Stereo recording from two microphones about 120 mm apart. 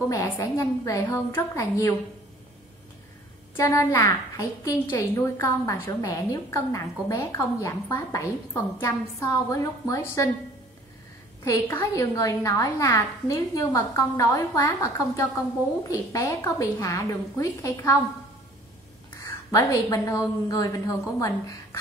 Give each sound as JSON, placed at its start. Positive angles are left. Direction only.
{"t": 0.1, "sound": "a woman's voice", "side_deg": 25}
{"t": 3.5, "sound": "a woman's voice", "side_deg": 25}
{"t": 11.4, "sound": "a woman's voice", "side_deg": 25}
{"t": 19.5, "sound": "a woman's voice", "side_deg": 30}